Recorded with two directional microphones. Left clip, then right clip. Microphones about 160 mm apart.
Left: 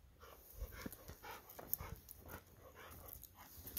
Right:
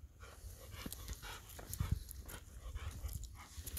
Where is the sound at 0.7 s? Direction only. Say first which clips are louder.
Right 3 dB; 15° left (ahead or behind).